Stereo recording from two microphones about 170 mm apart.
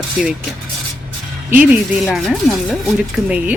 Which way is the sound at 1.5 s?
5° right (ahead or behind).